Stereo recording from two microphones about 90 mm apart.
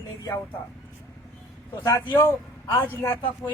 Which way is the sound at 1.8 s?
30° left (ahead or behind).